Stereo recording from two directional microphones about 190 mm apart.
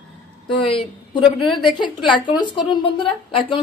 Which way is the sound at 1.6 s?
25° left (ahead or behind).